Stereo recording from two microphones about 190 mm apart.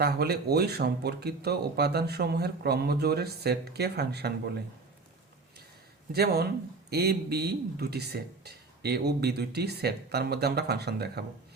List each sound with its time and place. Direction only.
0.0 s speech: 55° right (ahead or behind)
6.1 s speech: 55° right (ahead or behind)